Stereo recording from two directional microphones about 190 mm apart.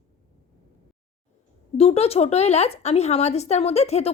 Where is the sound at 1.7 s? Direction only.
30° left (ahead or behind).